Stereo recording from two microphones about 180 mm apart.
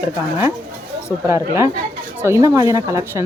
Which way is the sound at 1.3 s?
15° right (ahead or behind).